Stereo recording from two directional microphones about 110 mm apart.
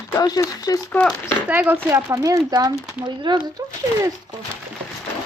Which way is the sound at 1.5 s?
15° right (ahead or behind).